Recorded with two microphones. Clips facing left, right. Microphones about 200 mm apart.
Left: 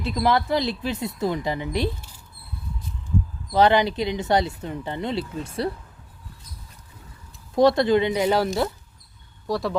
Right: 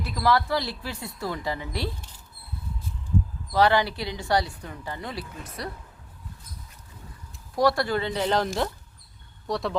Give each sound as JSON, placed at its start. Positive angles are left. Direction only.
{"t": 0.0, "sound": "speech", "side_deg": 20}
{"t": 3.5, "sound": "speech", "side_deg": 20}
{"t": 7.5, "sound": "speech", "side_deg": 20}